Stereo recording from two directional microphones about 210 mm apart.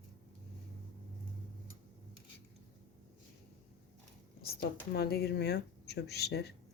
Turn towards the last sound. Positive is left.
turn(degrees=50)  # may be behind; listen again after turning